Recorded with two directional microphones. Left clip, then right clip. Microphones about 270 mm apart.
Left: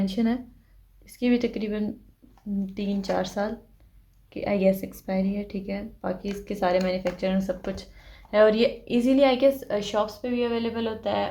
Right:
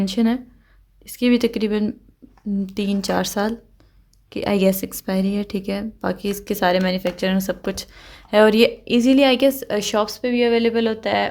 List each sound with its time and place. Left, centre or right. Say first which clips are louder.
0.0 s speech: right 6 dB; right